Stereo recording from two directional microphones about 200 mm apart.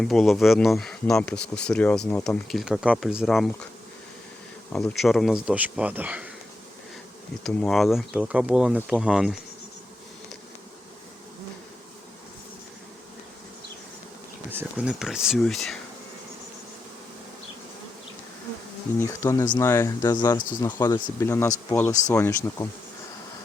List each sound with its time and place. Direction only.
0.0 s speech: centre (ahead or behind)
4.7 s speech: centre (ahead or behind)
7.4 s speech: centre (ahead or behind)
14.5 s speech: 10° right (ahead or behind)
18.9 s speech: 15° left (ahead or behind)